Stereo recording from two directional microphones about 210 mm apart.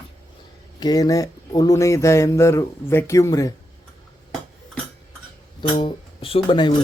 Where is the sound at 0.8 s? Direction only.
20° left (ahead or behind).